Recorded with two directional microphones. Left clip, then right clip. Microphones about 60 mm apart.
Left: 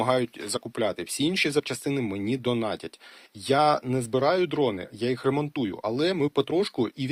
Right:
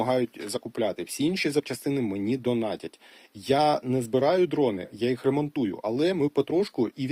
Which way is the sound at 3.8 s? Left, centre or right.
Right.